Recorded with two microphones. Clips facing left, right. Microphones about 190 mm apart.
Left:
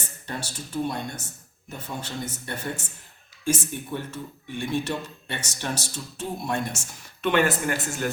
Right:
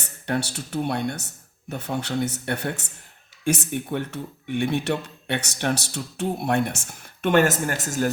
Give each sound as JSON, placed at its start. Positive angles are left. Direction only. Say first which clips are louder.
{"t": 0.3, "sound": "speech", "louder": "right 9 dB", "side_deg": -70}